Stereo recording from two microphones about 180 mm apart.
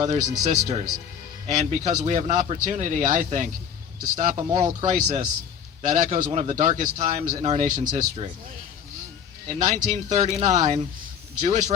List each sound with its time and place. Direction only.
0.1 s speech: 40° right (ahead or behind)
9.5 s speech: 40° right (ahead or behind)